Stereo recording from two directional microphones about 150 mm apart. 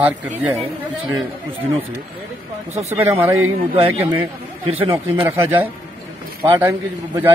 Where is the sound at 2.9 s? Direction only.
15° right (ahead or behind).